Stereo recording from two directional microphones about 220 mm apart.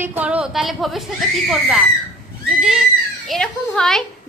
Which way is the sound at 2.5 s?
5° right (ahead or behind).